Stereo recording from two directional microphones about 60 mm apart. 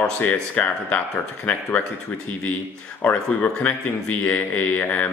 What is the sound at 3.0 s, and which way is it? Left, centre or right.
Speech, left.